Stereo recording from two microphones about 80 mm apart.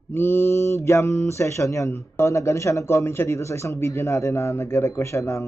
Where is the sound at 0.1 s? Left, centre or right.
Left.